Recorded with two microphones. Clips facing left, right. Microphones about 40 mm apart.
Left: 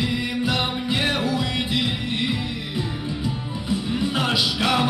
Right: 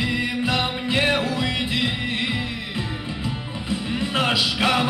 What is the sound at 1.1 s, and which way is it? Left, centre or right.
Music, centre.